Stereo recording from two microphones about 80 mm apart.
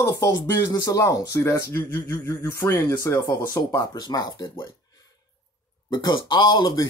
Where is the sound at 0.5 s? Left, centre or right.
Left.